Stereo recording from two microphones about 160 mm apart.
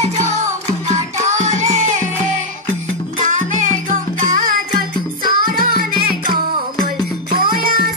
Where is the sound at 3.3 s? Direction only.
50° right (ahead or behind).